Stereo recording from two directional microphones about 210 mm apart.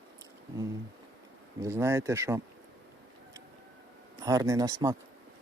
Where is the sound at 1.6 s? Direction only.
15° right (ahead or behind).